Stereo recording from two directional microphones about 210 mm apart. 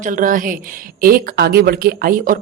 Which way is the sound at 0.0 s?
40° right (ahead or behind).